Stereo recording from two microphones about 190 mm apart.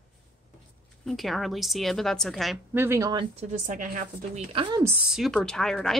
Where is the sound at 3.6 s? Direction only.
45° right (ahead or behind).